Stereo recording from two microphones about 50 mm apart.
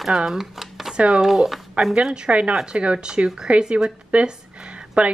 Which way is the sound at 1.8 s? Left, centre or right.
Centre.